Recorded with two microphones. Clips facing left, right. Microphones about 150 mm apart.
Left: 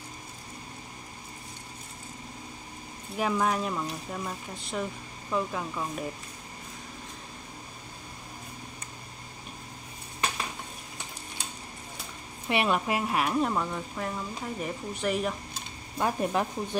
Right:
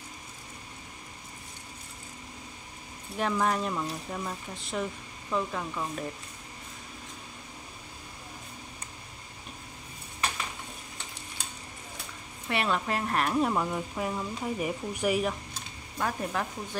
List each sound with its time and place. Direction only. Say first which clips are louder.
3.2 s speech: left 1 dB; 5° left (ahead or behind)
12.4 s speech: left 2 dB; 15° left (ahead or behind); by 15.3 s 5° right (ahead or behind)
16.0 s speech: left 4 dB; 20° left (ahead or behind)